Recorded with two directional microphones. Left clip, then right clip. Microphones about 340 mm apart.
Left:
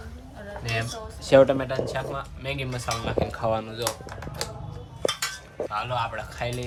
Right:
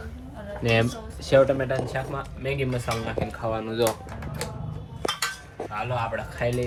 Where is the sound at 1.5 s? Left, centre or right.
Centre.